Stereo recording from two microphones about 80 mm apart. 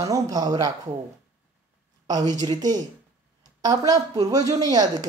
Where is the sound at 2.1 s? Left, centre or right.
Right.